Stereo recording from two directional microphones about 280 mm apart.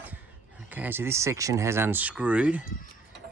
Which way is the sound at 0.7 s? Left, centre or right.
Centre.